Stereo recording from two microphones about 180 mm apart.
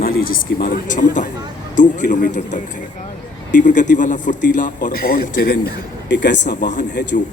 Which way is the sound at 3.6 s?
45° left (ahead or behind).